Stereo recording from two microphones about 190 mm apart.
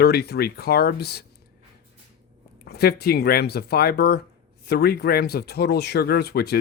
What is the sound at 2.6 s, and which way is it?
Speech, 55° left (ahead or behind).